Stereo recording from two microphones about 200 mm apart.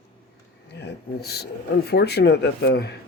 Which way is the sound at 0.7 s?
55° left (ahead or behind).